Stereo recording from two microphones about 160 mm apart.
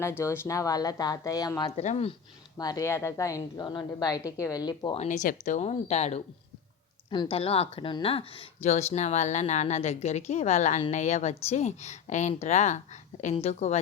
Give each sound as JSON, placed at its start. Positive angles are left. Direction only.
{"t": 0.0, "sound": "a woman's voice", "side_deg": 15}
{"t": 1.7, "sound": "speech", "side_deg": 40}
{"t": 2.6, "sound": "a woman's voice", "side_deg": 25}
{"t": 4.9, "sound": "speech", "side_deg": 50}
{"t": 7.1, "sound": "speech", "side_deg": 30}